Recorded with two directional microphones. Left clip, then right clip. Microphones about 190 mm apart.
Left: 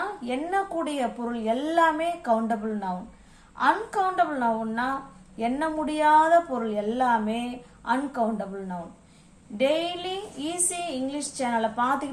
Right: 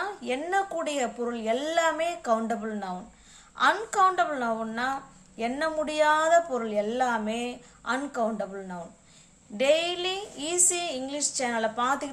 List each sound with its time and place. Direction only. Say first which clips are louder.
0.3 s a woman's voice: even; 30° right (ahead or behind)